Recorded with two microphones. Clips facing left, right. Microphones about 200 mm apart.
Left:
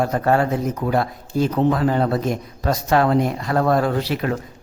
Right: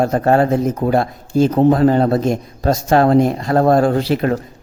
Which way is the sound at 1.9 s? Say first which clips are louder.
Right 5 dB; 30° right (ahead or behind).